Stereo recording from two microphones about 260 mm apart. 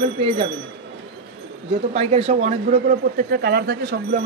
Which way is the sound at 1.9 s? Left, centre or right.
Right.